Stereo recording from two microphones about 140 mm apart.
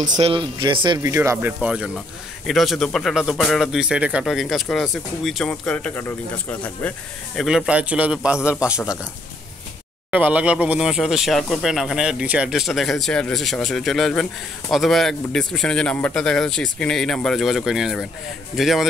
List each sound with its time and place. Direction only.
0.2 s speech: 35° right (ahead or behind); by 1.5 s 20° right (ahead or behind)
1.6 s a man's voice: 5° right (ahead or behind); by 6.9 s 10° left (ahead or behind)
7.3 s a man's voice: 5° right (ahead or behind)
10.1 s a man's voice: 10° right (ahead or behind)